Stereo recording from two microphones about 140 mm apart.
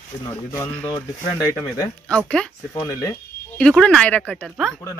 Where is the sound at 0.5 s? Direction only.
20° left (ahead or behind).